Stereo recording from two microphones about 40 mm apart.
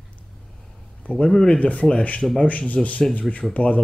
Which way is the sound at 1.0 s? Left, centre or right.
Left.